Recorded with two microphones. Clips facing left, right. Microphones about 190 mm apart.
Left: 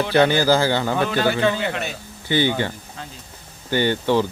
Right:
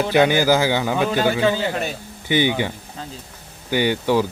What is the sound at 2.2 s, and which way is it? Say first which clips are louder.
Speech: right 1 dB; 15° right (ahead or behind).